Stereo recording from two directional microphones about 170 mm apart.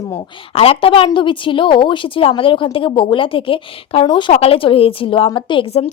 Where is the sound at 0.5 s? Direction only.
35° left (ahead or behind).